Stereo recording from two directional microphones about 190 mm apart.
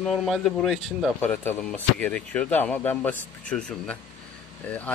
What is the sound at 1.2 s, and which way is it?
Speech, 10° left (ahead or behind).